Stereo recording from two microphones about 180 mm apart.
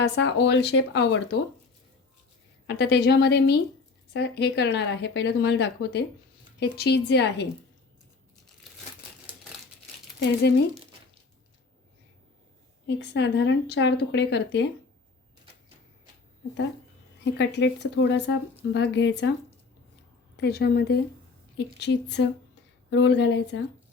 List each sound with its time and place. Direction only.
0.0 s speech: 80° left
2.6 s a woman's voice: 70° left (ahead or behind)
9.3 s crumpling: 10° right (ahead or behind)
13.0 s speech: 70° left (ahead or behind)
17.3 s speech: 75° left (ahead or behind)
20.3 s a woman's voice: 65° left (ahead or behind)
21.8 s speech: 75° left (ahead or behind)
22.9 s speech: 85° left